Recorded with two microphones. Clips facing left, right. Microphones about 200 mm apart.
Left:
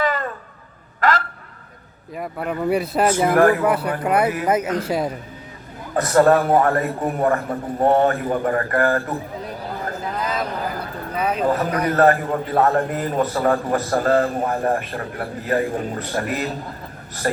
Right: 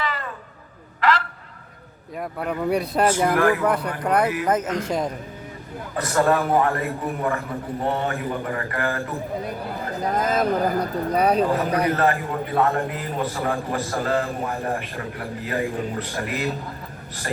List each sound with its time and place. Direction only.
0.0 s a sound: 45° left (ahead or behind)
2.1 s speech: centre (ahead or behind)
3.3 s a man's voice: 45° left (ahead or behind)
3.6 s speech: 5° left (ahead or behind)
5.9 s a man's voice: 40° left (ahead or behind)
10.0 s speech: 45° right (ahead or behind)
11.4 s a man's voice: 40° left (ahead or behind)